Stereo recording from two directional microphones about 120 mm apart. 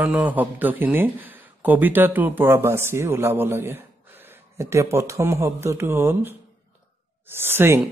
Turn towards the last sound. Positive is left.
turn(degrees=-20)  # may be behind; listen again after turning